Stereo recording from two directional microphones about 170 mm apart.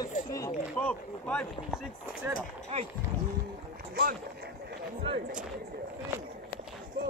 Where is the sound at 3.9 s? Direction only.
60° right (ahead or behind).